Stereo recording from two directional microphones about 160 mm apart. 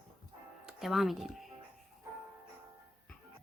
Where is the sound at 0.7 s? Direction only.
Centre (ahead or behind).